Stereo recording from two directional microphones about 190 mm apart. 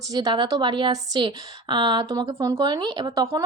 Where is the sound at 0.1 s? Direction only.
20° right (ahead or behind).